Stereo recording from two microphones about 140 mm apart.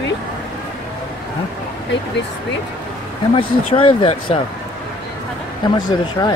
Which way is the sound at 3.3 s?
40° left (ahead or behind).